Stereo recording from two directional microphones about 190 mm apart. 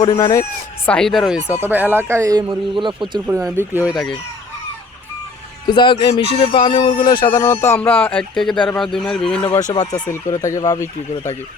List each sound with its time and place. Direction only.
0.0 s speech: 15° left (ahead or behind)
0.9 s speech: 5° left (ahead or behind); by 3.2 s 25° right (ahead or behind)
3.5 s speech: 10° right (ahead or behind)
3.9 s a man's voice: centre (ahead or behind)
5.6 s a sound: 25° left (ahead or behind)
7.0 s a man's voice: 25° left (ahead or behind); by 9.5 s 5° left (ahead or behind)
9.6 s speech: 35° left (ahead or behind)
9.9 s speech: 15° left (ahead or behind)